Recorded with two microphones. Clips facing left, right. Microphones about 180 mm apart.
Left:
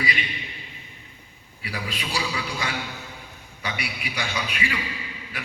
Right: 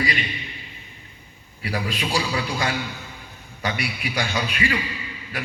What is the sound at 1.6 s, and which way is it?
A man's voice, 40° right (ahead or behind).